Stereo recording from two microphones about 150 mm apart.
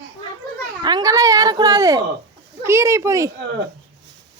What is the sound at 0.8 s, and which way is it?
Speech, 30° right (ahead or behind).